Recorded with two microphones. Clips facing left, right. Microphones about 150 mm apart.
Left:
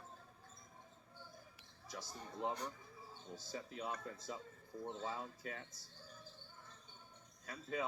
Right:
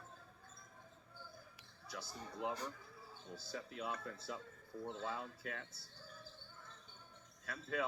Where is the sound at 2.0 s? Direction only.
25° left (ahead or behind).